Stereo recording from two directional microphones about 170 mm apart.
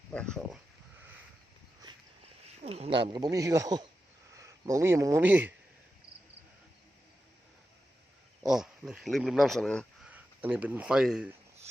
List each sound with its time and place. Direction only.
0.1 s speech: 5° left (ahead or behind)
2.6 s speech: 35° right (ahead or behind); by 5.5 s 10° right (ahead or behind)
8.4 s speech: 5° right (ahead or behind)
10.1 s speech: 10° right (ahead or behind)